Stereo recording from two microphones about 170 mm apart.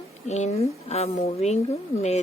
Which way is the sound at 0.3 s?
40° left (ahead or behind).